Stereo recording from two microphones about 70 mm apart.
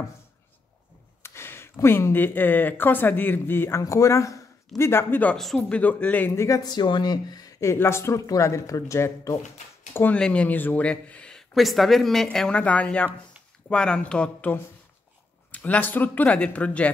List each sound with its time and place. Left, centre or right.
1.2 s speech: left
3.8 s speech: left
5.4 s speech: centre
5.7 s speech: left
6.3 s speech: left
6.6 s speech: left
7.6 s speech: left
10.1 s speech: centre
10.9 s speech: centre
11.5 s speech: centre
15.5 s speech: left